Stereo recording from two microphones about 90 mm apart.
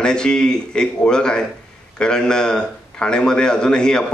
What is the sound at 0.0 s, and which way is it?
A man's voice, 10° left (ahead or behind).